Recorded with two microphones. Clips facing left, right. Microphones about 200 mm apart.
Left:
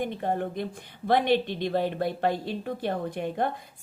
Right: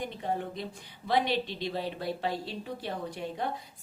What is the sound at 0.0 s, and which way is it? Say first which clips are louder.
A woman's voice: left 5 dB; 55° left (ahead or behind).